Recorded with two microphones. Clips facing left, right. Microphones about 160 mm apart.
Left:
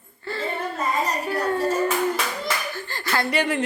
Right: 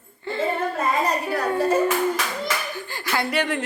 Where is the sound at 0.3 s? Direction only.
20° right (ahead or behind).